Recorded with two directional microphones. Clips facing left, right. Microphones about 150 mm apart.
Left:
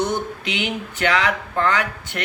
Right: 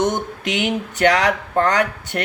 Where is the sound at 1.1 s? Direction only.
40° right (ahead or behind).